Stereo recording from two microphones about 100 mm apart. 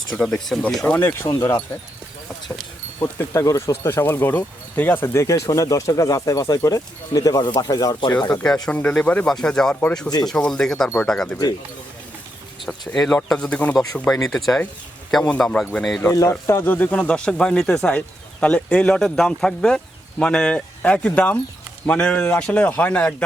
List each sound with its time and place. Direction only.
0.2 s speech: 5° left (ahead or behind)
0.9 s speech: 20° left (ahead or behind)
3.0 s speech: 30° left (ahead or behind)
8.4 s speech: 5° left (ahead or behind)
12.6 s speech: 5° left (ahead or behind)
15.2 s speech: 15° left (ahead or behind)
16.0 s speech: 35° left (ahead or behind); by 23.1 s 15° left (ahead or behind)